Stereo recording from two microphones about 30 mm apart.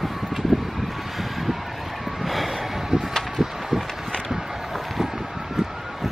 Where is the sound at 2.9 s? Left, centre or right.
Right.